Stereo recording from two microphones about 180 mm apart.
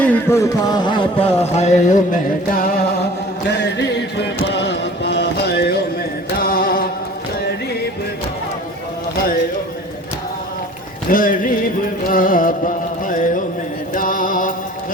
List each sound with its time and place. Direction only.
0.0 s music: 10° left (ahead or behind)
1.5 s speech: 40° left (ahead or behind)
2.5 s music: 55° left (ahead or behind)
3.5 s music: 75° left (ahead or behind)
4.4 s a sound: 75° left (ahead or behind); by 6.8 s 55° left (ahead or behind)
11.1 s music: 50° left (ahead or behind)
13.9 s mantra: 50° left (ahead or behind)